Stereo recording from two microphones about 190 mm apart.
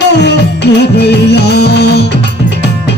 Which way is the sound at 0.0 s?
65° left (ahead or behind).